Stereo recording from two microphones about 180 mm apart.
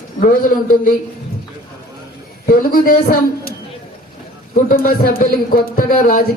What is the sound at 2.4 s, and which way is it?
Speech, 50° left (ahead or behind).